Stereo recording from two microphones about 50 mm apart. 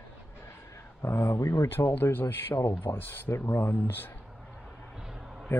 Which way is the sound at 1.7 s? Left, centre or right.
Left.